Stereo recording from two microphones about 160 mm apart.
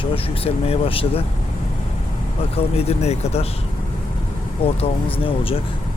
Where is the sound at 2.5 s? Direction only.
40° left (ahead or behind).